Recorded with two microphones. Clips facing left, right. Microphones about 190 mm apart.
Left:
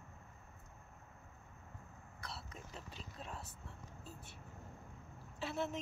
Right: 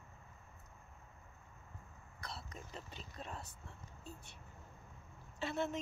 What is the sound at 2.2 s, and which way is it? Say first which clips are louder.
Speech: right 1 dB; 5° left (ahead or behind).